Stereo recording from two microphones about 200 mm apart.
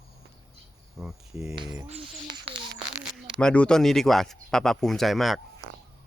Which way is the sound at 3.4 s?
5° left (ahead or behind).